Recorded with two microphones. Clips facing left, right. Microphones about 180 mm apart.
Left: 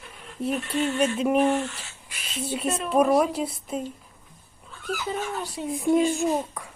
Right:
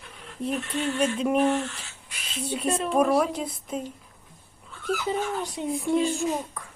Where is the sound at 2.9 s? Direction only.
5° left (ahead or behind).